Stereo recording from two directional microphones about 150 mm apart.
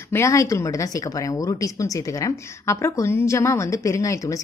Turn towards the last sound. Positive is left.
turn(degrees=20)  # may be behind; listen again after turning